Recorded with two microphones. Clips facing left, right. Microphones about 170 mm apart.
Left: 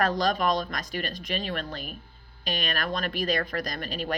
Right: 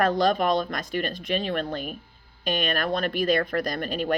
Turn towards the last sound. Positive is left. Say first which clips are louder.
# right 5 dB
turn(degrees=-50)  # may be behind; listen again after turning